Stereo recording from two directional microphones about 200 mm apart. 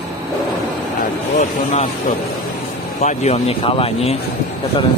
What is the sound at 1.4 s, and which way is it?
Speech, 35° left (ahead or behind).